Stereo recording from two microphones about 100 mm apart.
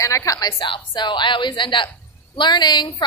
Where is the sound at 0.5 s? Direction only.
55° left (ahead or behind).